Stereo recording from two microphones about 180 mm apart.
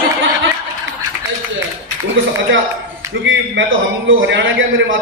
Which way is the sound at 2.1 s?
90° right.